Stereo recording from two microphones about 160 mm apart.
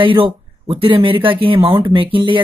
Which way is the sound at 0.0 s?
35° right (ahead or behind).